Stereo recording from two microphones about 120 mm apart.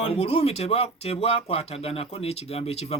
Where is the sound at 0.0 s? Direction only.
55° left (ahead or behind).